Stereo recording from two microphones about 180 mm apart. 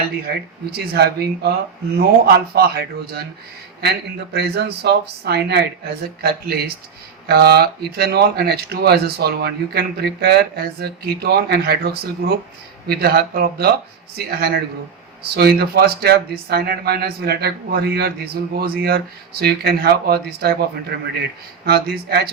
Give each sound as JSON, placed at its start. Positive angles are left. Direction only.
{"t": 0.2, "sound": "speech", "side_deg": -60}